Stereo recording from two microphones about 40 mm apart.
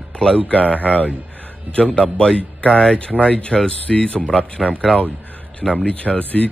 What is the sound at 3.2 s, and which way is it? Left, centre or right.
Speech, left.